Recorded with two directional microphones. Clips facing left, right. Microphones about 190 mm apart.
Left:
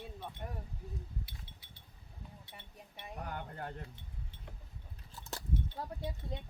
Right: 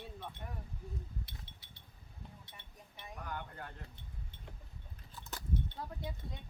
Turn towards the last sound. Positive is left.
turn(degrees=35)  # may be behind; listen again after turning